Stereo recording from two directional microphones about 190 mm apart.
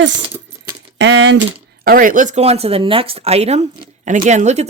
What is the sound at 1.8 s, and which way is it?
A woman's voice, 45° right (ahead or behind).